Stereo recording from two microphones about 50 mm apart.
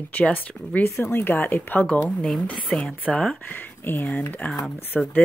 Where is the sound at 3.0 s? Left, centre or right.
Left.